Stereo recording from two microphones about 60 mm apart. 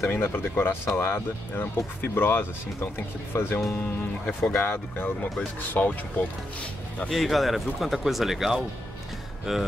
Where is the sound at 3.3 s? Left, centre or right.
Left.